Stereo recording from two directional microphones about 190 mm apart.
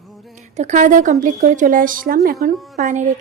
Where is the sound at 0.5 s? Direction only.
40° right (ahead or behind).